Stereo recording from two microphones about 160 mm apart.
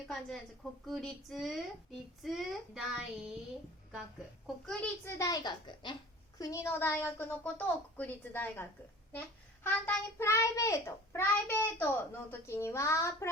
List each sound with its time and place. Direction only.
0.1 s speech: centre (ahead or behind)
4.4 s speech: 5° left (ahead or behind)
5.0 s a woman's voice: 20° left (ahead or behind)
6.4 s a child's voice: 20° left (ahead or behind)
9.6 s a child's voice: 10° left (ahead or behind)